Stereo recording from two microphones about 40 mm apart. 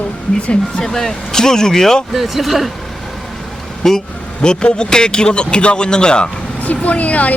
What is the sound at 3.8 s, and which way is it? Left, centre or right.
Speech, centre.